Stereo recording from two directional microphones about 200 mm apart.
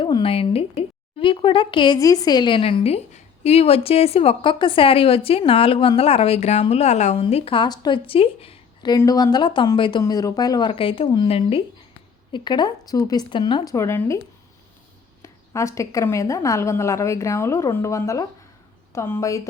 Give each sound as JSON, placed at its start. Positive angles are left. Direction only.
{"t": 0.0, "sound": "a woman's voice", "side_deg": 25}
{"t": 15.2, "sound": "a woman's voice", "side_deg": 15}